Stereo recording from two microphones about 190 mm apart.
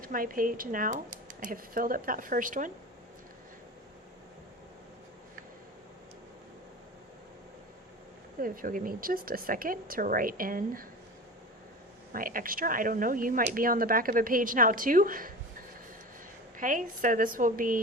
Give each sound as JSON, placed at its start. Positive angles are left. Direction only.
{"t": 0.0, "sound": "speech", "side_deg": -45}
{"t": 8.4, "sound": "speech", "side_deg": -45}
{"t": 12.1, "sound": "speech", "side_deg": -45}
{"t": 16.6, "sound": "speech", "side_deg": -45}